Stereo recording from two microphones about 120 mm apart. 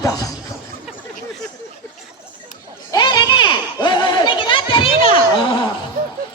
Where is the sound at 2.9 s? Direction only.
40° left (ahead or behind).